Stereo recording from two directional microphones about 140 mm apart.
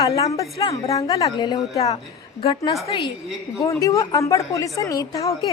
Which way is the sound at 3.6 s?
25° left (ahead or behind).